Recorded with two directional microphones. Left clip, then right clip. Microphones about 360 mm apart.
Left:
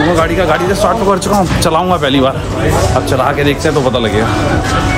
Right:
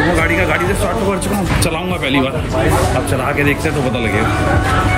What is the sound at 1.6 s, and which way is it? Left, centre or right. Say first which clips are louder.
Speech: left 7 dB; centre.